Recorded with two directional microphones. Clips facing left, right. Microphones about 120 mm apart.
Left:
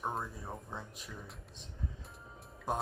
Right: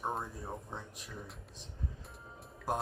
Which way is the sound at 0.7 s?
Centre (ahead or behind).